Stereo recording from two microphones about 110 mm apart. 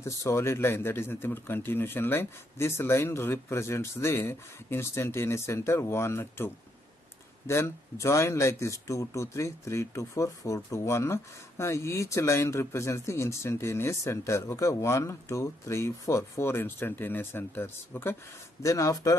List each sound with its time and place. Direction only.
0.0 s speech: 25° left (ahead or behind)
18.6 s speech: 30° left (ahead or behind)